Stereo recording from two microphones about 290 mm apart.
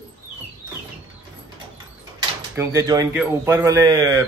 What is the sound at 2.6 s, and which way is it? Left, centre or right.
A man's voice, centre.